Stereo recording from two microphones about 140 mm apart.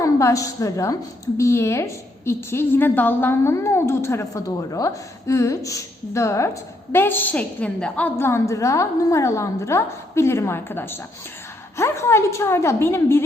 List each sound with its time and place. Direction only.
0.0 s a woman's voice: 20° left (ahead or behind)
8.2 s a woman's voice: 20° left (ahead or behind)